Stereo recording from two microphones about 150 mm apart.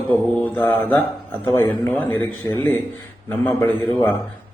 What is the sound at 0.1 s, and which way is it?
Mantra, 10° left (ahead or behind).